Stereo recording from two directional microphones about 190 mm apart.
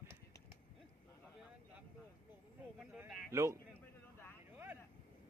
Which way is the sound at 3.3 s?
15° right (ahead or behind).